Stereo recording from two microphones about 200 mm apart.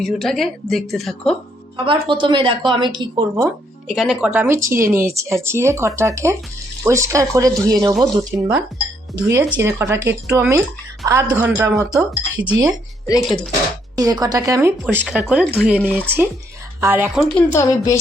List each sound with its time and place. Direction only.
0.0 s speech: centre (ahead or behind)
1.7 s a woman's voice: 25° right (ahead or behind)
3.8 s speech: centre (ahead or behind)
9.1 s speech: 15° right (ahead or behind)
13.2 s speech: 5° left (ahead or behind)
13.9 s speech: 20° right (ahead or behind); by 17.4 s centre (ahead or behind)
17.5 s a woman's voice: 15° left (ahead or behind)